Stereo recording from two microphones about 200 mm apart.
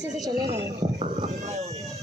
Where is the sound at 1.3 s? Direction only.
35° right (ahead or behind).